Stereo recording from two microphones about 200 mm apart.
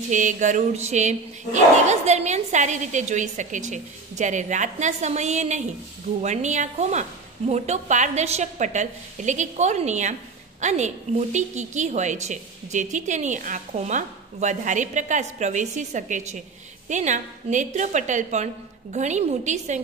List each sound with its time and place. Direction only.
0.1 s a woman's voice: 40° right (ahead or behind)